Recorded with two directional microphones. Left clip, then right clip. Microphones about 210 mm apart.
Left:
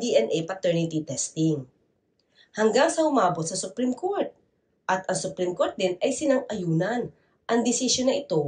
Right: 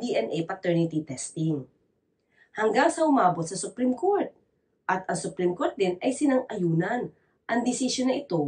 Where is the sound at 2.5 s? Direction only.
20° left (ahead or behind).